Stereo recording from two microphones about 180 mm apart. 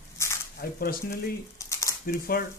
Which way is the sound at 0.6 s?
55° left (ahead or behind).